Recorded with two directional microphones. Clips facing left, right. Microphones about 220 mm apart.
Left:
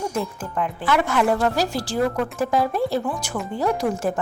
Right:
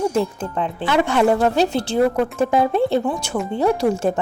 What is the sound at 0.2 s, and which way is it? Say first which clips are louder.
Speech: right 4 dB; 25° right (ahead or behind).